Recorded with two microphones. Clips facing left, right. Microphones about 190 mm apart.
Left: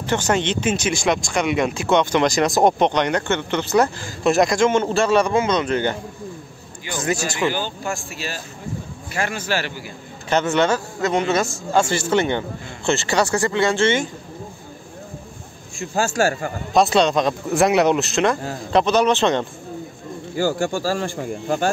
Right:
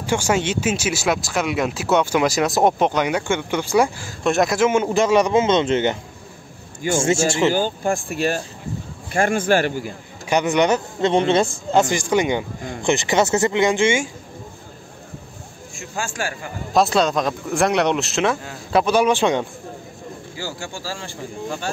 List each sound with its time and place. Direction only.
0.0 s speech: 10° right (ahead or behind)
4.2 s speech: centre (ahead or behind); by 5.9 s 25° right (ahead or behind)
7.0 s speech: 25° right (ahead or behind)
7.5 s speech: 45° right (ahead or behind)
10.3 s speech: 15° right (ahead or behind)
11.0 s speech: 30° right (ahead or behind)
11.7 s speech: 15° right (ahead or behind)
16.0 s a man's voice: 40° left (ahead or behind)
16.7 s speech: centre (ahead or behind)
20.3 s a man's voice: 55° left (ahead or behind)